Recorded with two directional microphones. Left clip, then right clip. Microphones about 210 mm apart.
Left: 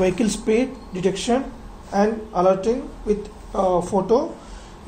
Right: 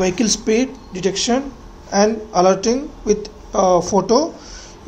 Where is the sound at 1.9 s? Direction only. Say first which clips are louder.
Right 4 dB; 35° right (ahead or behind).